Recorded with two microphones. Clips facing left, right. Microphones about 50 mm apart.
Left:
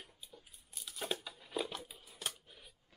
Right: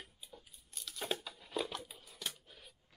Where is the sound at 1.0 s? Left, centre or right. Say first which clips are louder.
Right 1 dB; centre.